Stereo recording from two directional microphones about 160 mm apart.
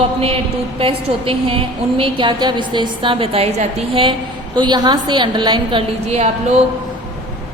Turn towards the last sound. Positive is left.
turn(degrees=-40)  # may be behind; listen again after turning